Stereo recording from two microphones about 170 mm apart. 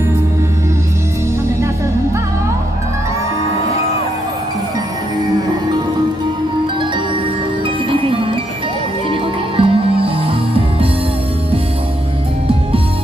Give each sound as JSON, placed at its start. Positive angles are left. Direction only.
{"t": 7.9, "sound": "music", "side_deg": -30}
{"t": 9.6, "sound": "music", "side_deg": -30}